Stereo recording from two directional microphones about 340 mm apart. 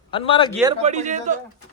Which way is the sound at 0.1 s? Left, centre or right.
Centre.